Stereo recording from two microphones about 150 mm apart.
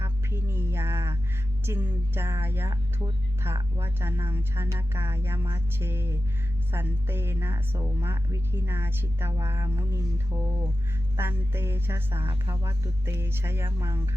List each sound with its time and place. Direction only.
0.0 s music: 15° right (ahead or behind)
1.6 s a woman's voice: 15° right (ahead or behind)
11.2 s a woman's voice: 15° right (ahead or behind)